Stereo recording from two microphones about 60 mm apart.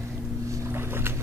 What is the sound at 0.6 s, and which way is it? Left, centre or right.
Boat, right.